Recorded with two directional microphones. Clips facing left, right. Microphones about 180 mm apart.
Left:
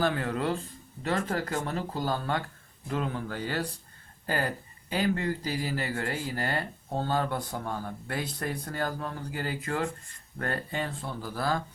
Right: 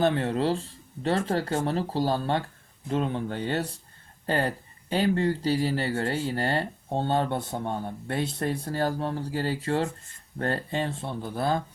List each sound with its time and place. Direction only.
0.0 s speech: 25° right (ahead or behind)